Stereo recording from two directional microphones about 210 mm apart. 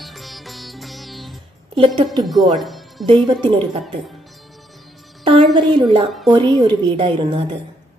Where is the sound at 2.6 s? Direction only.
Centre (ahead or behind).